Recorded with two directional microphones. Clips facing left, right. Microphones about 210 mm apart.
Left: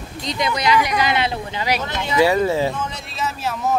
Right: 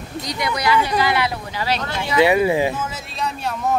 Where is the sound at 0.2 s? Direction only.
20° left (ahead or behind).